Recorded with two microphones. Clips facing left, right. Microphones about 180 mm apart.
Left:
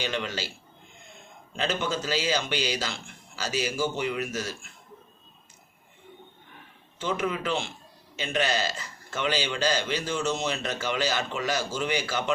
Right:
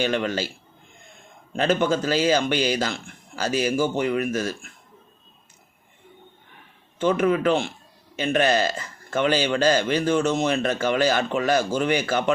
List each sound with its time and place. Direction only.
0.0 s speech: 50° right (ahead or behind)
1.5 s speech: 55° right (ahead or behind)
7.0 s speech: 55° right (ahead or behind)